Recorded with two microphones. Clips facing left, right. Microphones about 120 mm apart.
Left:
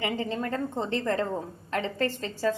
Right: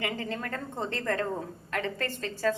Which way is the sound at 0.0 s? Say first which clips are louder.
Left 4 dB; 25° left (ahead or behind).